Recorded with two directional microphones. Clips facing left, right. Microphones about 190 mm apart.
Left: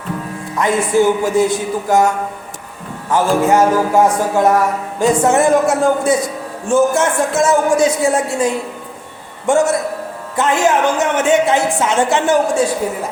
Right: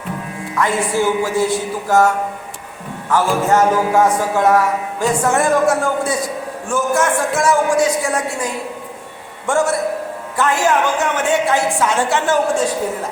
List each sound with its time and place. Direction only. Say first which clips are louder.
0.6 s a man's voice: left 4 dB; 20° left (ahead or behind)
3.1 s a man's voice: left 2 dB; 10° left (ahead or behind)
9.5 s a woman's voice: left 3 dB; 20° left (ahead or behind)